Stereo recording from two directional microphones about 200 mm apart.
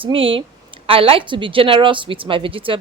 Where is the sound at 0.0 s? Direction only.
25° right (ahead or behind).